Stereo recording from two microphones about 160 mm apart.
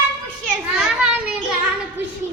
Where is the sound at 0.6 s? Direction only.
5° right (ahead or behind).